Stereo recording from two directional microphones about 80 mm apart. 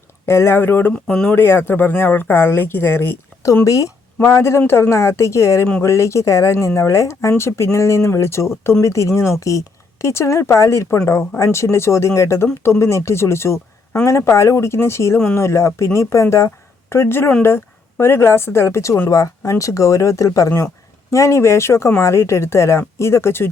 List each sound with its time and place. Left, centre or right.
0.3 s speech: left
0.9 s speech: centre
1.4 s speech: left
3.4 s speech: left